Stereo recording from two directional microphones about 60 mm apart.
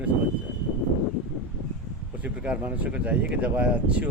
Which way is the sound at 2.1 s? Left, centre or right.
Right.